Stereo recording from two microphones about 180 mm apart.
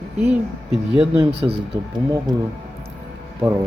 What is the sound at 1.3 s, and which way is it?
Speech, 30° right (ahead or behind).